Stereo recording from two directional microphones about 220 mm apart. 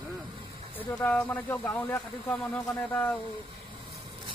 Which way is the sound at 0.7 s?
5° left (ahead or behind).